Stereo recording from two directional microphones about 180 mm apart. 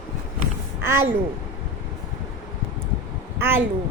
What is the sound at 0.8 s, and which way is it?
Speech, 15° right (ahead or behind).